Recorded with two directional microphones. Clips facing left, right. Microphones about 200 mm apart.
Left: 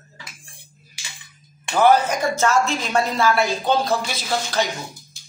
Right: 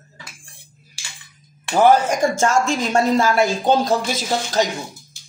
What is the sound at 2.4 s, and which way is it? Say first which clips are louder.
Speech: right 2 dB; 45° right (ahead or behind).